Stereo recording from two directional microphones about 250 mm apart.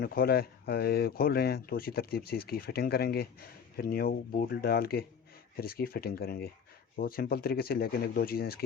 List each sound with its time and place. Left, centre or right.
0.0 s speech: left